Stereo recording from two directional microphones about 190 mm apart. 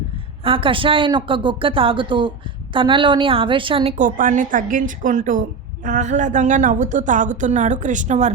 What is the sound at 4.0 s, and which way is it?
A woman's voice, 45° right (ahead or behind).